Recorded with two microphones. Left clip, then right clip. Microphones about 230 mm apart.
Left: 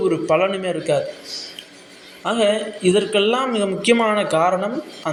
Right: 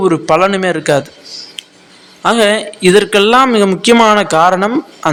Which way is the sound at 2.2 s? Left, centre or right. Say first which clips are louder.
Right 8 dB; right.